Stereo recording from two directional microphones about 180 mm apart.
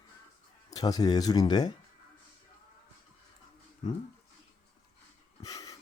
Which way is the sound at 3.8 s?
25° left (ahead or behind).